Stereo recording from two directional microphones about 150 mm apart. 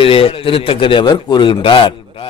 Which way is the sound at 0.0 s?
35° left (ahead or behind).